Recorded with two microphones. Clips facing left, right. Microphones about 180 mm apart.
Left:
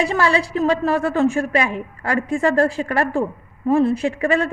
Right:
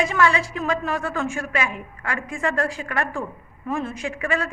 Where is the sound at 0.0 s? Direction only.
35° left (ahead or behind).